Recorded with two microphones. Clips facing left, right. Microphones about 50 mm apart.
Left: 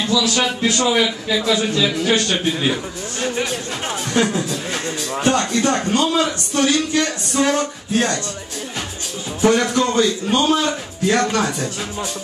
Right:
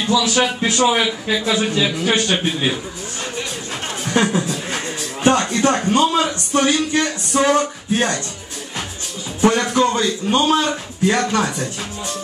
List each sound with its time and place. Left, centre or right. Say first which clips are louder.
0.1 s speech: right 3 dB; right
4.1 s a sound: right 2 dB; centre
5.3 s speech: right 1 dB; centre
9.4 s speech: right 1 dB; centre